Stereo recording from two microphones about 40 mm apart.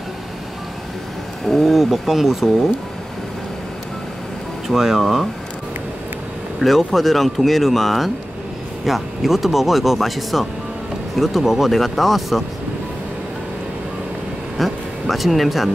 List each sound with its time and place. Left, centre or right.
1.4 s speech: centre
4.6 s speech: centre
5.0 s speech: centre
6.6 s speech: centre
14.6 s speech: centre